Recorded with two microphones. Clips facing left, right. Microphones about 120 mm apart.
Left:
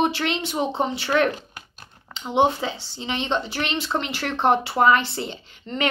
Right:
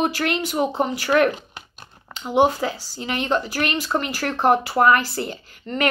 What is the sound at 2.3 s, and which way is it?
Speech, 25° left (ahead or behind).